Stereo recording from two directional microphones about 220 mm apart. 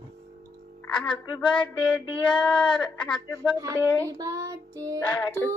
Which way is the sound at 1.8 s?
5° left (ahead or behind).